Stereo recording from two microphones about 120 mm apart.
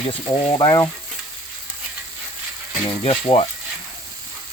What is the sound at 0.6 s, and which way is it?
Sizzle, 30° left (ahead or behind).